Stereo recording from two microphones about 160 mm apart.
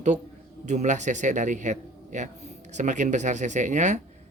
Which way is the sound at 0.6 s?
50° right (ahead or behind).